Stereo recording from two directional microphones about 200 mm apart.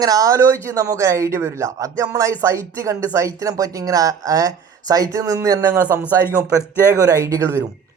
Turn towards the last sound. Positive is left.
turn(degrees=-15)  # may be behind; listen again after turning